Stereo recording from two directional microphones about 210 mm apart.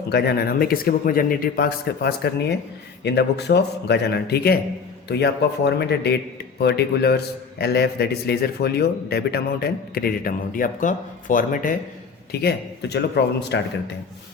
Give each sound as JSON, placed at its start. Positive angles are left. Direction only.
{"t": 0.1, "sound": "a man's voice", "side_deg": 50}